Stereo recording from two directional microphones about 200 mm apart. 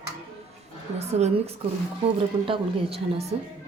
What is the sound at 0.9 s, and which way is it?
Speech, 30° right (ahead or behind).